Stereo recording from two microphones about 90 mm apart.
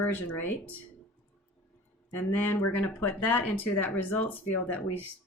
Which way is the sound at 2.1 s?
20° left (ahead or behind).